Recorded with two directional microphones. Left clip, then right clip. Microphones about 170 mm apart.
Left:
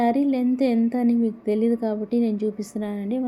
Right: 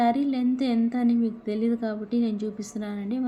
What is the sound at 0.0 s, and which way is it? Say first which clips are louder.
Speech: left 2 dB; 25° left (ahead or behind).